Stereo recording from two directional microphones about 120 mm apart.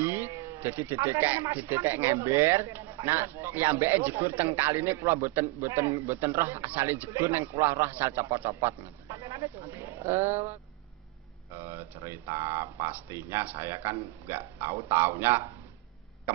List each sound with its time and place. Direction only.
0.0 s a man's voice: 20° right (ahead or behind)
11.5 s a man's voice: 20° right (ahead or behind)